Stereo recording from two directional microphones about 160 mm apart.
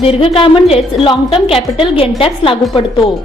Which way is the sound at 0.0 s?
35° left (ahead or behind).